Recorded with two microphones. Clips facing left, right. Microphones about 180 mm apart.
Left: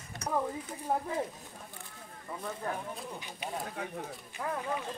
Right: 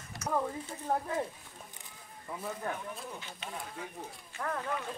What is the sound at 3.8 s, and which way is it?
Speech, 65° left (ahead or behind).